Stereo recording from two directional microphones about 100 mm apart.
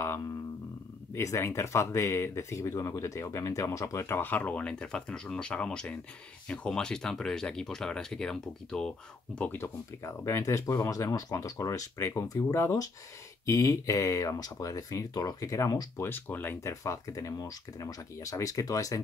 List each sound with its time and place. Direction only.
1.1 s speech: 30° left (ahead or behind); by 9.6 s 15° left (ahead or behind)
9.6 s speech: 30° left (ahead or behind)
16.0 s speech: 20° left (ahead or behind)
16.6 s speech: 30° left (ahead or behind)